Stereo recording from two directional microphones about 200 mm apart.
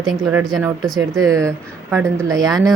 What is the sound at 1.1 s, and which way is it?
A woman's voice, 15° right (ahead or behind).